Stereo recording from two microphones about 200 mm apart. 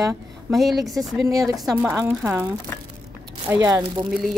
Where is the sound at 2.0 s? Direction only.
10° right (ahead or behind).